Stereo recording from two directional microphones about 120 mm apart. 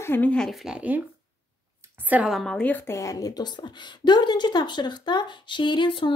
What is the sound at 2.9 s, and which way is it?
A woman's voice, 25° left (ahead or behind).